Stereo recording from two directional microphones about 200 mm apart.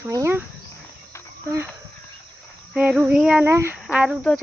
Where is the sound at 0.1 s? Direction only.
15° right (ahead or behind).